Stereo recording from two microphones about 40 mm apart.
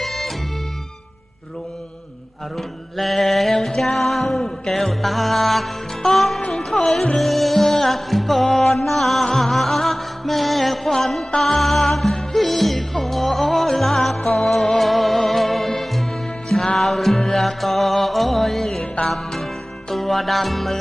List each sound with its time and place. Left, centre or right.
0.0 s music: centre
2.6 s mantra: centre
3.5 s music: centre
6.4 s music: centre